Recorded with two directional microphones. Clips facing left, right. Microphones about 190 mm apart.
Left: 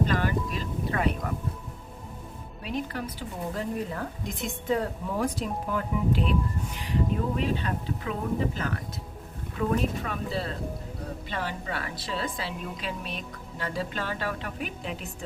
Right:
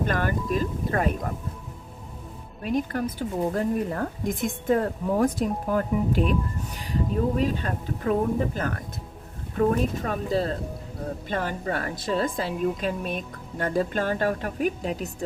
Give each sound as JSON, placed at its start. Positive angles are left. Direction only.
{"t": 0.0, "sound": "a sound", "side_deg": -50}
{"t": 0.5, "sound": "speech", "side_deg": -45}
{"t": 2.6, "sound": "a woman's voice", "side_deg": -50}